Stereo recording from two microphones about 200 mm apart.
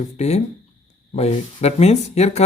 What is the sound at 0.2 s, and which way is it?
Speech, 35° left (ahead or behind).